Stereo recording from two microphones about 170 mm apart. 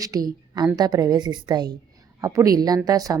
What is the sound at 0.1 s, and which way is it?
A woman's voice, 20° right (ahead or behind).